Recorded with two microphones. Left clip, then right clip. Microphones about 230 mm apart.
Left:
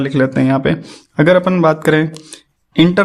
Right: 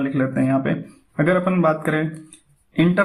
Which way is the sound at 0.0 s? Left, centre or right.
Left.